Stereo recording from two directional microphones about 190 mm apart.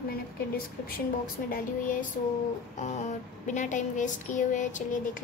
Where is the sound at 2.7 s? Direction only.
40° left (ahead or behind).